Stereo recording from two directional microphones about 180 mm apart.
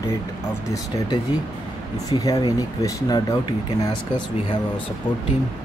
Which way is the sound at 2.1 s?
20° left (ahead or behind).